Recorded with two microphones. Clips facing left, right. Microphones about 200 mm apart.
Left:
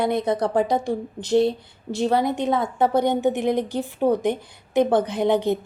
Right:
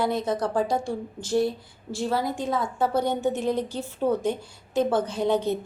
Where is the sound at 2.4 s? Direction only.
70° left (ahead or behind).